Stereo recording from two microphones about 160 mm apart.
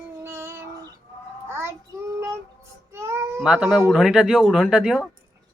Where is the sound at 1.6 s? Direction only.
15° right (ahead or behind).